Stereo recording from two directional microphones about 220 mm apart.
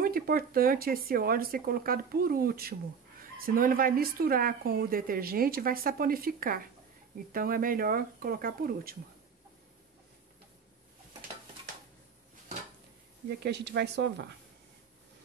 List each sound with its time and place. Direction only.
0.0 s speech: 40° right (ahead or behind)
13.3 s speech: 50° right (ahead or behind)